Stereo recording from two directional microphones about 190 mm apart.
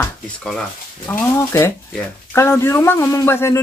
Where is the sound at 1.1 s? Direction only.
10° left (ahead or behind).